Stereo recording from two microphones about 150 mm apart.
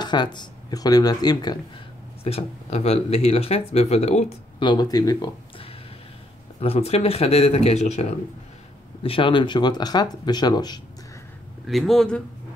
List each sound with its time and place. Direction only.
0.0 s speech: 30° left (ahead or behind)
2.2 s speech: 45° left (ahead or behind)
4.6 s speech: 30° left (ahead or behind)
6.6 s speech: 40° left (ahead or behind)
9.0 s speech: 35° left (ahead or behind)
11.6 s speech: centre (ahead or behind)